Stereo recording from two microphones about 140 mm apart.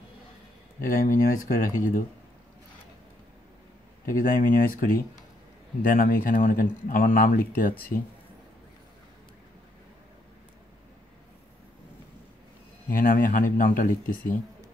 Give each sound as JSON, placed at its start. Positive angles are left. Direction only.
{"t": 0.8, "sound": "speech", "side_deg": 75}
{"t": 4.0, "sound": "speech", "side_deg": 90}
{"t": 12.9, "sound": "speech", "side_deg": 80}